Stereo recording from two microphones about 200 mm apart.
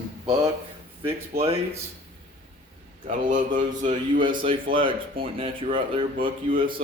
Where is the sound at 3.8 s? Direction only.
40° right (ahead or behind).